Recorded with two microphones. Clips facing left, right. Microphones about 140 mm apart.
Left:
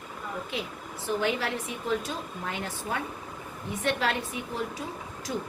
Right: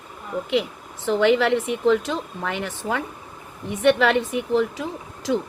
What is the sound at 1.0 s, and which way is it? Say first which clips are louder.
Speech: right 10 dB; 90° right.